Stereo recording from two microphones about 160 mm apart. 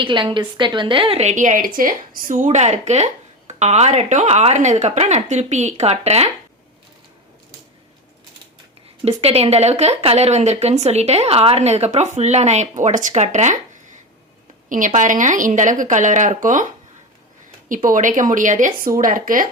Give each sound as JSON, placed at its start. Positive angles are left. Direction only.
{"t": 0.0, "sound": "a woman's voice", "side_deg": -30}
{"t": 9.0, "sound": "a woman's voice", "side_deg": -40}
{"t": 14.7, "sound": "a woman's voice", "side_deg": -55}
{"t": 17.8, "sound": "speech", "side_deg": -55}